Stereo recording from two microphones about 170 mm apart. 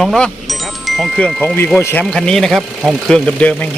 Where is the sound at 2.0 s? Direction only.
5° left (ahead or behind).